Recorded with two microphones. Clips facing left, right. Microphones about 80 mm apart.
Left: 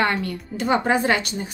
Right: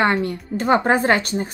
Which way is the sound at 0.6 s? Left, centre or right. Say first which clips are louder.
Right 3 dB; right.